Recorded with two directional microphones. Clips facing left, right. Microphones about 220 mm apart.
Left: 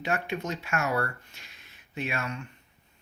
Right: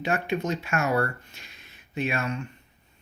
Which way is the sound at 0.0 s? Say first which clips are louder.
Right 4 dB; 25° right (ahead or behind).